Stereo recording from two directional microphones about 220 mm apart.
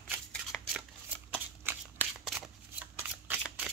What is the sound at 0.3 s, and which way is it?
Shuffling cards, centre (ahead or behind).